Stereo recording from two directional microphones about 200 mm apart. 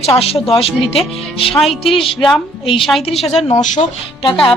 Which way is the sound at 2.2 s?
Centre (ahead or behind).